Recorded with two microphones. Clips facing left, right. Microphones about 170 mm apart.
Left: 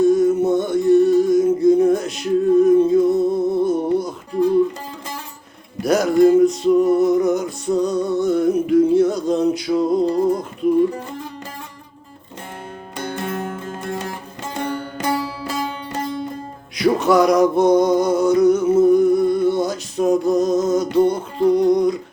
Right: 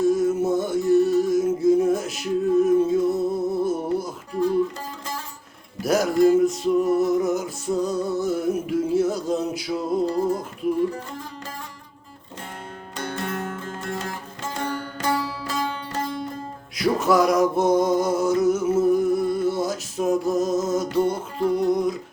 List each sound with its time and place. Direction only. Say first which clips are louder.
0.0 s a sound: left 5 dB; centre (ahead or behind)
4.3 s music: left 5 dB; 5° right (ahead or behind)
5.8 s music: left 4 dB; centre (ahead or behind)
13.0 s music: left 3 dB; 15° left (ahead or behind)
16.7 s music: left 4 dB; centre (ahead or behind)
21.5 s a sound: left 6 dB; 5° right (ahead or behind)